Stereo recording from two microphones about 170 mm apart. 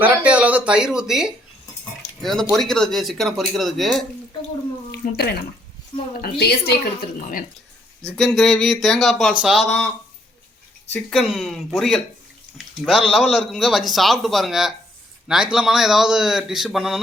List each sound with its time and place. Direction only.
0.0 s speech: 10° right (ahead or behind)
4.9 s speech: 70° left (ahead or behind)
5.9 s speech: 30° left (ahead or behind)
6.2 s a woman's voice: 70° left (ahead or behind)
8.0 s speech: centre (ahead or behind)
11.1 s speech: centre (ahead or behind)